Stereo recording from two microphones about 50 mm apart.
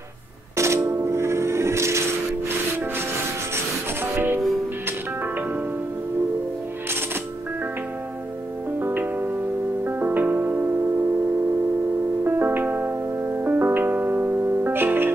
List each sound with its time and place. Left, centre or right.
0.6 s music: right
4.0 s music: right
8.7 s music: right
12.2 s music: right